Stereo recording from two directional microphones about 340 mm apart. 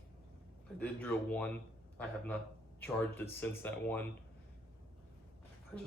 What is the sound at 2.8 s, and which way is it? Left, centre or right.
Speech, centre.